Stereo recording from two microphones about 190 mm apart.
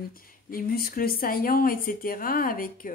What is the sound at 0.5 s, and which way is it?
Speech, 50° left (ahead or behind).